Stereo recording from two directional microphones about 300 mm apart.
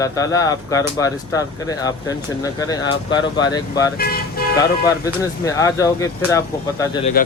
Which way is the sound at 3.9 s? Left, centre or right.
Left.